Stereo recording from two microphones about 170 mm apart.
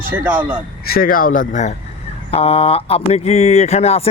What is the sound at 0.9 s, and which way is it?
Speech, 60° left (ahead or behind).